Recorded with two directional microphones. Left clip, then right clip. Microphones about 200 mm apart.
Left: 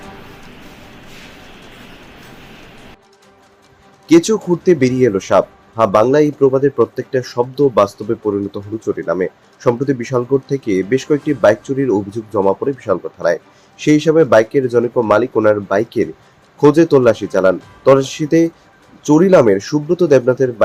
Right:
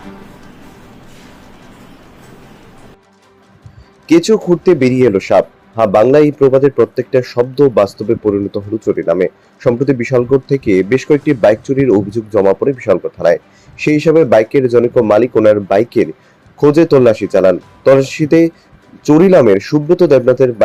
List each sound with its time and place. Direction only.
4.0 s speech: 15° right (ahead or behind)